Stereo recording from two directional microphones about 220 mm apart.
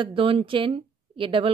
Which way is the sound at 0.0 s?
25° right (ahead or behind).